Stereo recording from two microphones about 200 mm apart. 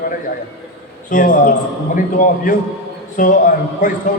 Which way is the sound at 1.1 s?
40° left (ahead or behind).